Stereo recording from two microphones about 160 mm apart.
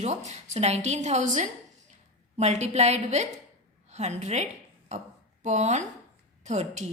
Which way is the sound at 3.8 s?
45° right (ahead or behind).